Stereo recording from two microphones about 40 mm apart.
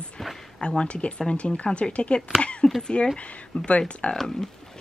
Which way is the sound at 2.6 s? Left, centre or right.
Centre.